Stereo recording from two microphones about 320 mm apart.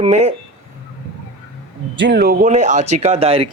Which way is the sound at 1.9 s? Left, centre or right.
Right.